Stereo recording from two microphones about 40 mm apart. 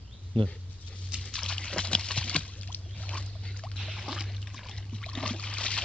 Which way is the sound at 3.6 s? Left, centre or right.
Centre.